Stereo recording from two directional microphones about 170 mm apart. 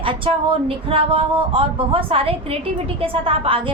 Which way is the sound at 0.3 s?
35° right (ahead or behind).